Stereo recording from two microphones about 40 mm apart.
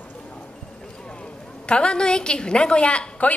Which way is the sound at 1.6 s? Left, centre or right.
Left.